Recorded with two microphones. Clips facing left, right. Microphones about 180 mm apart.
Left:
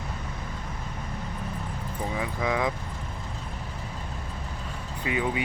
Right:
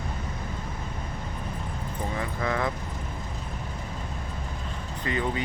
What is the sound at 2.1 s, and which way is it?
Speech, 10° left (ahead or behind).